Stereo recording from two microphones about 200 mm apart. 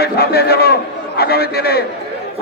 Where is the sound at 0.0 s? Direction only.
50° left (ahead or behind).